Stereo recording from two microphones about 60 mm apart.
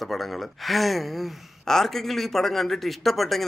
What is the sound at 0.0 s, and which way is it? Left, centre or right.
Speech, centre.